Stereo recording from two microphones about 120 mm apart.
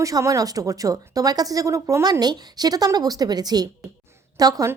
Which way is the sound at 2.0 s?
35° right (ahead or behind).